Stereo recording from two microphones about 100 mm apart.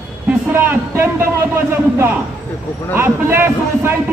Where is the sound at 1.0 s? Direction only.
25° right (ahead or behind).